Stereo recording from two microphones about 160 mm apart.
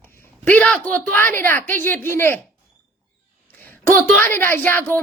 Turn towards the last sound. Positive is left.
turn(degrees=15)  # may be behind; listen again after turning